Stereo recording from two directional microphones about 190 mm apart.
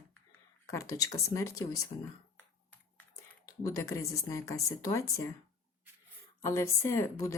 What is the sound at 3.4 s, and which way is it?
A woman's voice, 20° left (ahead or behind).